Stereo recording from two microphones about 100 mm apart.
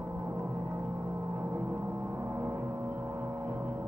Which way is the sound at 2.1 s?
25° right (ahead or behind).